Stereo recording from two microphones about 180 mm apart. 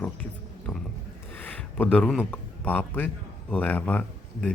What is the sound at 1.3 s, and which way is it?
A man's voice, 10° left (ahead or behind).